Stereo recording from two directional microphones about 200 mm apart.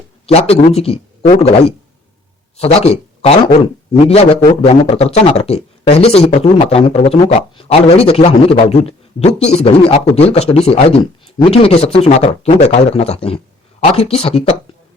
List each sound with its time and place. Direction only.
0.3 s a man's voice: 30° left (ahead or behind)
2.6 s a man's voice: 30° left (ahead or behind)